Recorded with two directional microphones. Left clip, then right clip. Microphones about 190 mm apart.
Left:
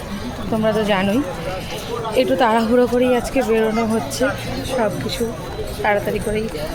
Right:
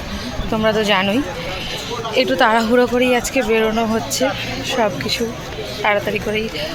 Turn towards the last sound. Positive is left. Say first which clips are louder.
# right 1 dB
turn(degrees=-10)  # may be behind; listen again after turning